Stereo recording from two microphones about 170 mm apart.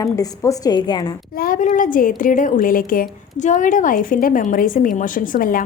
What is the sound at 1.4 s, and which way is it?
A woman's voice, 55° left (ahead or behind).